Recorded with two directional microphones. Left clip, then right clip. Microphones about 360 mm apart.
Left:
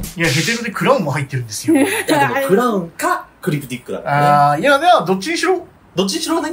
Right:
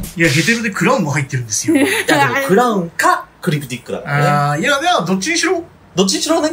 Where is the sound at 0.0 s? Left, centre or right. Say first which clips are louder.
Right 3 dB; centre.